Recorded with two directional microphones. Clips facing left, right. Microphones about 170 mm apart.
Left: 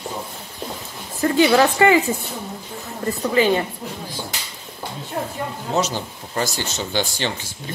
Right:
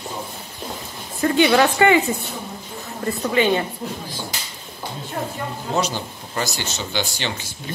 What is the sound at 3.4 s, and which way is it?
Speech, 35° left (ahead or behind).